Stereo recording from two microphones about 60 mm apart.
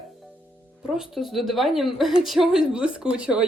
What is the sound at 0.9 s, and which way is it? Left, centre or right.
Speech, centre.